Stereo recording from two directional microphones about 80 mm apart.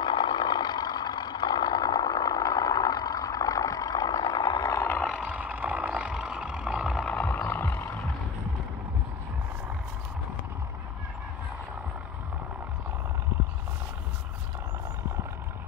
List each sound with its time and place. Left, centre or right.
0.0 s vehicle: left
5.2 s vehicle: centre
7.1 s a sound: centre
7.3 s vehicle: left